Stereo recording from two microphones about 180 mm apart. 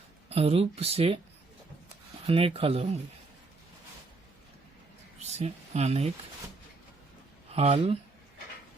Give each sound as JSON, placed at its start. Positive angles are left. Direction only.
{"t": 0.3, "sound": "speech", "side_deg": -35}
{"t": 2.2, "sound": "speech", "side_deg": -30}
{"t": 5.2, "sound": "speech", "side_deg": -35}
{"t": 7.5, "sound": "speech", "side_deg": -35}